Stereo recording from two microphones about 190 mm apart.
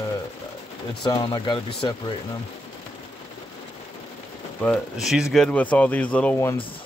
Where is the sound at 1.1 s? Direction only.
20° left (ahead or behind).